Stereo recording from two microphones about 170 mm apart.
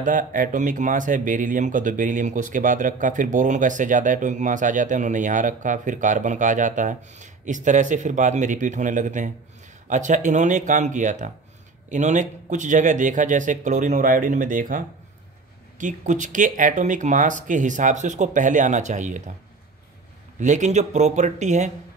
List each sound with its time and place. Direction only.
0.0 s speech: 50° right (ahead or behind)
20.3 s speech: 45° right (ahead or behind)